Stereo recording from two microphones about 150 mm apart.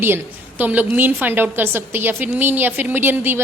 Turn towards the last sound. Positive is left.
turn(degrees=-15)  # may be behind; listen again after turning